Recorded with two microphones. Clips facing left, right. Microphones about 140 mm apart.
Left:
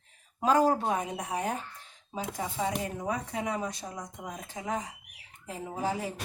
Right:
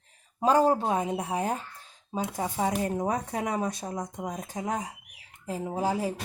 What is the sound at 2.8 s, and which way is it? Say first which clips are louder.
Speech: right 5 dB; 40° right (ahead or behind).